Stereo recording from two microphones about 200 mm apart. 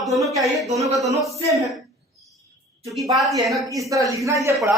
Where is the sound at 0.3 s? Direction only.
Centre (ahead or behind).